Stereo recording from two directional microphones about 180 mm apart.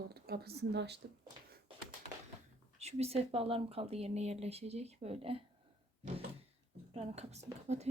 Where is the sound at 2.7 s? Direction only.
35° right (ahead or behind).